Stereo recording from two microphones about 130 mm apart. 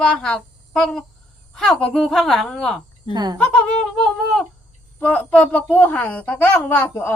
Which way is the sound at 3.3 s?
10° left (ahead or behind).